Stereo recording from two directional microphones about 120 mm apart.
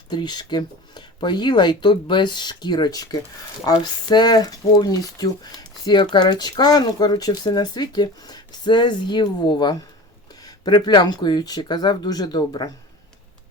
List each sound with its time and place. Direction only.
0.1 s speech: 35° left (ahead or behind)